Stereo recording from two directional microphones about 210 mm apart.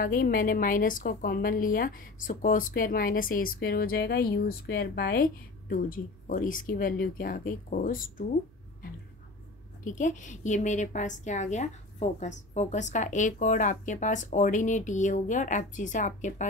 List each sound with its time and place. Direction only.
0.0 s a woman's voice: 40° left (ahead or behind)
9.8 s a woman's voice: 35° left (ahead or behind)